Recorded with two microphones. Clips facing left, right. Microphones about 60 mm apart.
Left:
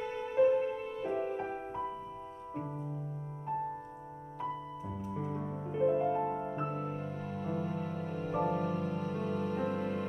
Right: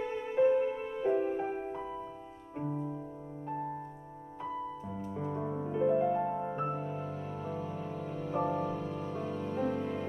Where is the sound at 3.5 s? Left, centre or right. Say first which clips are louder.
Left 2 dB; centre.